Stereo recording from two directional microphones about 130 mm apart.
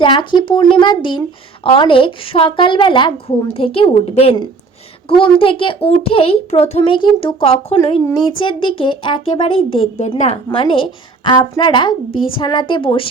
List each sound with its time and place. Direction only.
0.0 s a child's voice: 40° left (ahead or behind); by 6.9 s 55° left (ahead or behind)
6.9 s a woman's voice: 40° left (ahead or behind)